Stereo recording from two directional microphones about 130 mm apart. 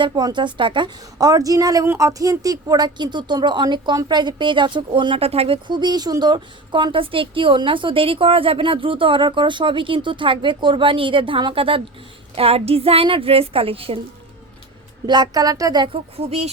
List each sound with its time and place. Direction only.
0.0 s a woman's voice: 35° right (ahead or behind)
15.0 s a woman's voice: 35° right (ahead or behind)
16.1 s a woman's voice: 50° right (ahead or behind)